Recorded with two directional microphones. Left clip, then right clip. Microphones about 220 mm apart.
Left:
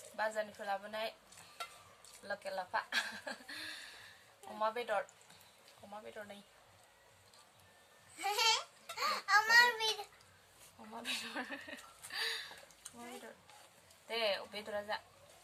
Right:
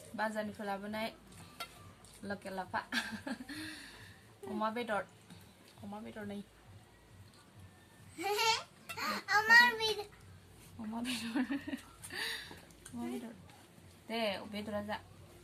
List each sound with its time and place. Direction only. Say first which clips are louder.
0.2 s a woman's voice: even; centre (ahead or behind)
2.2 s a woman's voice: left 1 dB; centre (ahead or behind)
8.2 s a child's voice: even; 10° left (ahead or behind)